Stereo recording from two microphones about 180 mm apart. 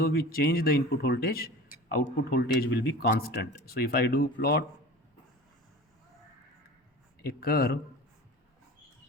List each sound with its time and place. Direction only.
0.0 s a man's voice: 55° left (ahead or behind)
7.2 s a man's voice: 55° left (ahead or behind)